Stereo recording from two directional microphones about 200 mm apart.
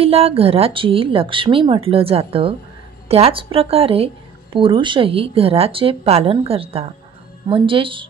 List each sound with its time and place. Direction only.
0.0 s speech: 30° right (ahead or behind)